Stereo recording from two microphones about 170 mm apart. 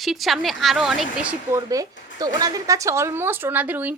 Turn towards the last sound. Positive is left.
turn(degrees=-10)  # may be behind; listen again after turning